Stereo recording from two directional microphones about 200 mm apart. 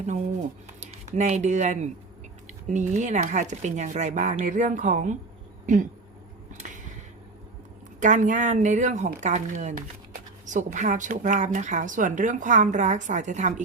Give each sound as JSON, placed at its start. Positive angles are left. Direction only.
{"t": 0.8, "sound": "speech", "side_deg": -35}
{"t": 6.6, "sound": "a sound", "side_deg": -40}
{"t": 7.9, "sound": "speech", "side_deg": -40}